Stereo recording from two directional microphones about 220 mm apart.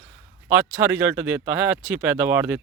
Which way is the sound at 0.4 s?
10° right (ahead or behind).